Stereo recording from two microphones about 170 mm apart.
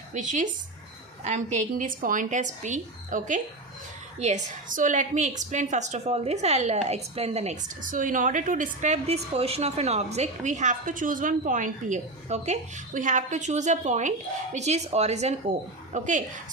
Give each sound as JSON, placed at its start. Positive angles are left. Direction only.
{"t": 0.1, "sound": "a woman's voice", "side_deg": -45}